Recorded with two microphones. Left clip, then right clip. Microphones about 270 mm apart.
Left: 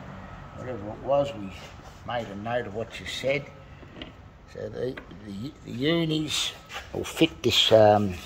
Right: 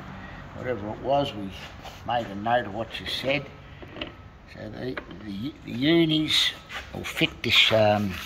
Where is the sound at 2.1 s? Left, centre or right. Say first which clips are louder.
Right 5 dB; centre.